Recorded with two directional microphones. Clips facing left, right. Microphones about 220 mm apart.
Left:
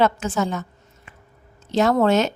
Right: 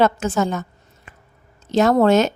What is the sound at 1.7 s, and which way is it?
Speech, 40° right (ahead or behind).